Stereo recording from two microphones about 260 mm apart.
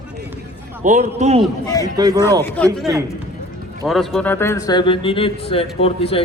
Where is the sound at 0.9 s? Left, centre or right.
Right.